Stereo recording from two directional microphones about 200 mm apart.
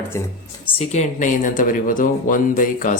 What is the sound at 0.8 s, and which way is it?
Speech, 35° left (ahead or behind).